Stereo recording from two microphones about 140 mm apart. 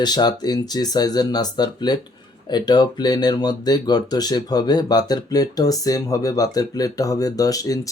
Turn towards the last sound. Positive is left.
turn(degrees=25)  # may be behind; listen again after turning